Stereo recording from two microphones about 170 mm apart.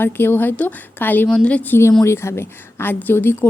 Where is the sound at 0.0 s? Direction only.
10° left (ahead or behind).